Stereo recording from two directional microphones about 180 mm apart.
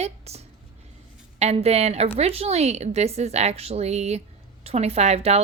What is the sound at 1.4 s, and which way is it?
Speech, 35° right (ahead or behind).